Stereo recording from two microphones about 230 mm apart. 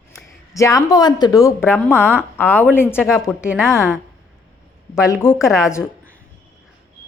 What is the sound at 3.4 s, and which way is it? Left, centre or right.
Speech, centre.